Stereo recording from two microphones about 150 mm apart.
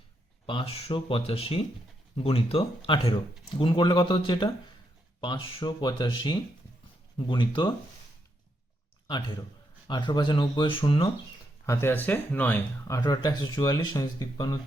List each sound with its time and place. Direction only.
0.4 s speech: 40° left (ahead or behind)
9.8 s speech: 30° left (ahead or behind)
11.6 s speech: 20° left (ahead or behind)